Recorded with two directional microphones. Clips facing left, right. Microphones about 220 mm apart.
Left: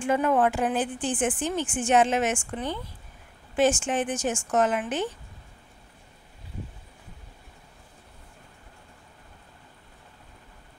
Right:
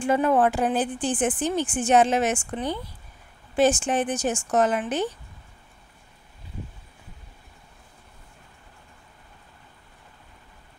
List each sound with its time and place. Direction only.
0.0 s speech: 35° right (ahead or behind)